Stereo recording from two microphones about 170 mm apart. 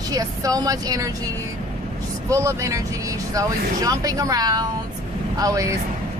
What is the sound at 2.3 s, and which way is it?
Speech, 20° right (ahead or behind).